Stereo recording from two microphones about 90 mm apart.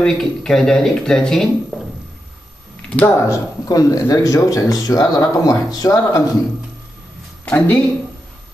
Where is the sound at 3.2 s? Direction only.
35° left (ahead or behind).